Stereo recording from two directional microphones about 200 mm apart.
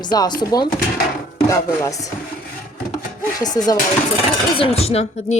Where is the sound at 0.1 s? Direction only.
20° left (ahead or behind).